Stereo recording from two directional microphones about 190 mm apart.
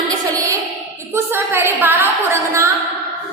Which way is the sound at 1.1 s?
10° right (ahead or behind).